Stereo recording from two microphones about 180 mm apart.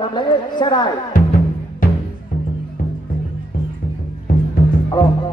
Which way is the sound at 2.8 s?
50° left (ahead or behind).